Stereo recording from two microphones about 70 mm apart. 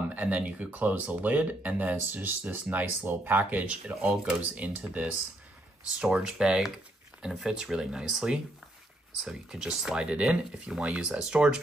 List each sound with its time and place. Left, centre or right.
0.1 s speech: right
6.1 s speech: centre